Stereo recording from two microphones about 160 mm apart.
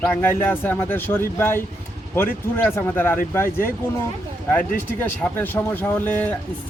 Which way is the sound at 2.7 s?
15° left (ahead or behind).